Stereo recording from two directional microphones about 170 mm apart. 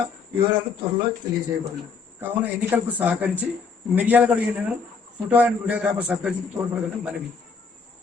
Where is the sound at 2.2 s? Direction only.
10° right (ahead or behind).